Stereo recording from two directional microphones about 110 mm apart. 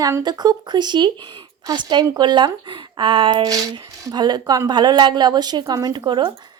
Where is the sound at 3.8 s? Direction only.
30° right (ahead or behind).